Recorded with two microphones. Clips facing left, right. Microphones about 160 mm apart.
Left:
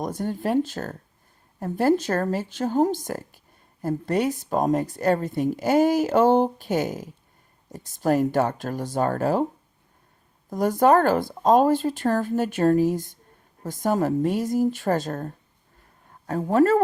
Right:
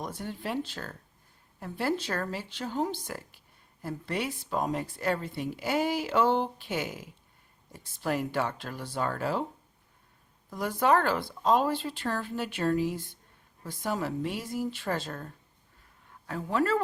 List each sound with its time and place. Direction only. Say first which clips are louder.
0.0 s speech: left 9 dB; 45° left (ahead or behind)
10.5 s speech: left 7 dB; 45° left (ahead or behind)